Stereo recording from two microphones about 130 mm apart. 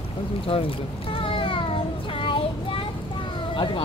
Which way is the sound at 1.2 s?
45° left (ahead or behind).